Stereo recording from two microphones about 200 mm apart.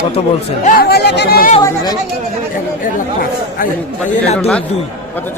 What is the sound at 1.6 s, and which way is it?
Speech, 20° left (ahead or behind).